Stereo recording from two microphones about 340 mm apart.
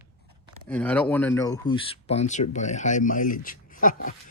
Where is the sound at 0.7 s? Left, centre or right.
Centre; by 4.1 s left.